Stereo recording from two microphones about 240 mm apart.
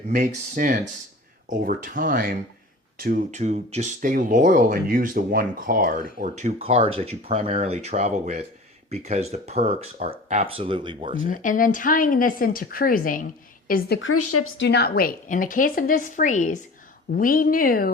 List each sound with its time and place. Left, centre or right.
0.1 s speech: right
11.3 s a woman's voice: left
14.1 s speech: left
14.6 s a woman's voice: left